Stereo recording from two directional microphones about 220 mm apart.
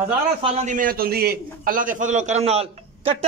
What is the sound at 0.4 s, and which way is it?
A man's voice, 30° right (ahead or behind).